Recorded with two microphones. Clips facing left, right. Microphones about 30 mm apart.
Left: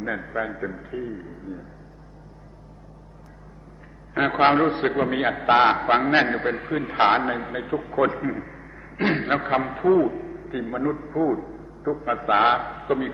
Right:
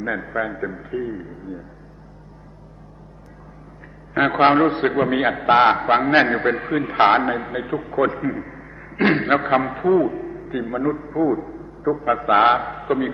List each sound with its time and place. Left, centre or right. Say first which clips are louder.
0.0 s a man's voice: right 3 dB; centre
4.1 s a man's voice: right 3 dB; centre